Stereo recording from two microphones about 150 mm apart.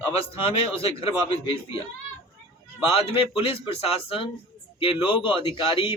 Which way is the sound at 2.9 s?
35° left (ahead or behind).